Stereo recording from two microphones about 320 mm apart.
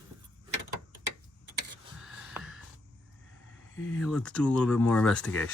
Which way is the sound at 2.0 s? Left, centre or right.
Centre.